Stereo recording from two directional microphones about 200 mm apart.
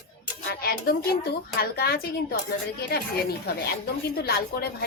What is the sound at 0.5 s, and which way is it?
Speech, 50° left (ahead or behind).